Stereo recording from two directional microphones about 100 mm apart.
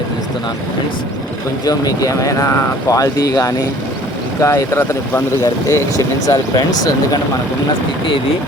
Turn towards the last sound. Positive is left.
turn(degrees=35)  # may be behind; listen again after turning